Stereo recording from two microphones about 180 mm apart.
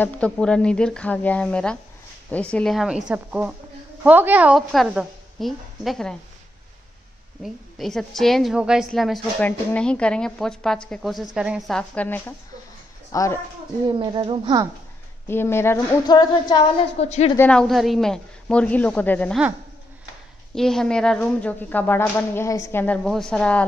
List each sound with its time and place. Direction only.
0.0 s a woman's voice: 5° left (ahead or behind)
7.4 s a woman's voice: centre (ahead or behind); by 13.4 s 15° left (ahead or behind)
13.8 s a woman's voice: 25° right (ahead or behind)
15.2 s speech: 15° left (ahead or behind)
16.1 s music: 25° left (ahead or behind)
17.0 s a woman's voice: 35° left (ahead or behind)
17.4 s a woman's voice: 5° left (ahead or behind)
20.5 s speech: centre (ahead or behind)